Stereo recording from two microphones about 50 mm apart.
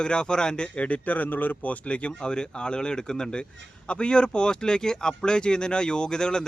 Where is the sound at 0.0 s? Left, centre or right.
Centre.